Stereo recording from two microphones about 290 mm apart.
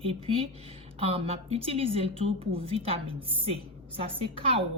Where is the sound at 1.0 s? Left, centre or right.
Centre.